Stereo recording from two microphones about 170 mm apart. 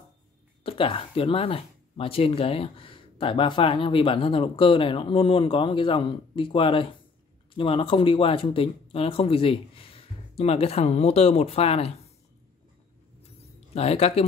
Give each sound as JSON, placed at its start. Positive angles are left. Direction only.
{"t": 0.7, "sound": "speech", "side_deg": 30}
{"t": 13.7, "sound": "speech", "side_deg": 35}